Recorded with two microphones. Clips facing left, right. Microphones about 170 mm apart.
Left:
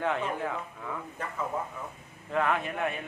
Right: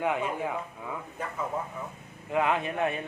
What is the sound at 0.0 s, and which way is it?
Speech, 15° right (ahead or behind).